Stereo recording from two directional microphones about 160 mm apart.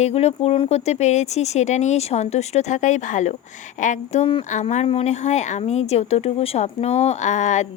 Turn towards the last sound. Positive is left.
turn(degrees=50)  # may be behind; listen again after turning